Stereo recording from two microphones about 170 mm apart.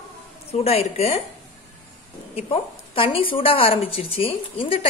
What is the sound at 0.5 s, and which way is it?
Speech, 35° left (ahead or behind).